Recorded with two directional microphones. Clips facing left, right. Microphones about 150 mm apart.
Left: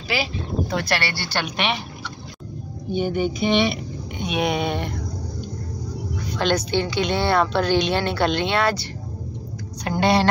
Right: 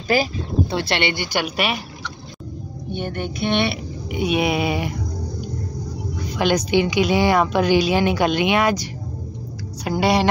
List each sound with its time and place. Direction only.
0.1 s speech: 45° right (ahead or behind)
0.7 s a woman's voice: 25° right (ahead or behind); by 1.8 s 5° right (ahead or behind)
2.9 s speech: 5° left (ahead or behind)
6.3 s a woman's voice: 10° right (ahead or behind)
9.8 s a woman's voice: 10° right (ahead or behind)